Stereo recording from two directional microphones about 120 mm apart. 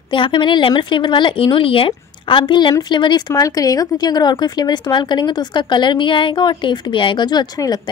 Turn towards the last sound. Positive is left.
turn(degrees=35)  # may be behind; listen again after turning